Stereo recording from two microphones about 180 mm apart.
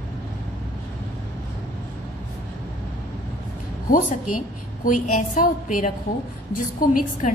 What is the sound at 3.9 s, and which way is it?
A woman's voice, 50° left (ahead or behind).